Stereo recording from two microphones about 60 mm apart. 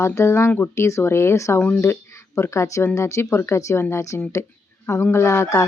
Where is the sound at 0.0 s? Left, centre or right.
Left.